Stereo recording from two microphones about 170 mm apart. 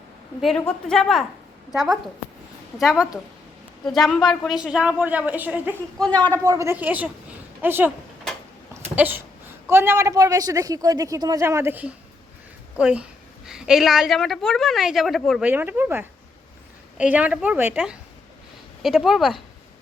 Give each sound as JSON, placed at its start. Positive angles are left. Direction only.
{"t": 0.4, "sound": "a woman's voice", "side_deg": 5}
{"t": 6.0, "sound": "a man's voice", "side_deg": 10}
{"t": 6.4, "sound": "a woman's voice", "side_deg": -20}
{"t": 7.9, "sound": "a sound", "side_deg": 5}
{"t": 8.7, "sound": "a woman's voice", "side_deg": -10}
{"t": 15.4, "sound": "a woman's voice", "side_deg": -10}